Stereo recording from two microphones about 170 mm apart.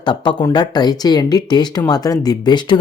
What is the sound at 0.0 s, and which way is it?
Speech, 25° left (ahead or behind).